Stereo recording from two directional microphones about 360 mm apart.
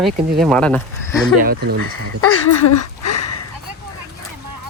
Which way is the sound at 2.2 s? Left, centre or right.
Left.